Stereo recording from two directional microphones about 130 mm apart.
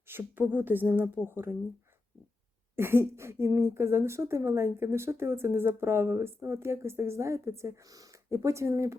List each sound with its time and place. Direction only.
0.1 s a woman's voice: 15° right (ahead or behind)
2.7 s a woman's voice: 20° right (ahead or behind)